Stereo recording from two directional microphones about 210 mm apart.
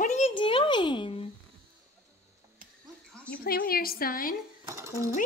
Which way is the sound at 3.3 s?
45° left (ahead or behind).